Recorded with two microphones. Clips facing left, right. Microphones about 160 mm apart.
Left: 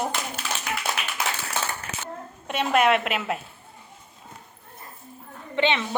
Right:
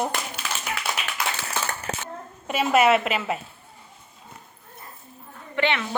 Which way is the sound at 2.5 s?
5° right (ahead or behind).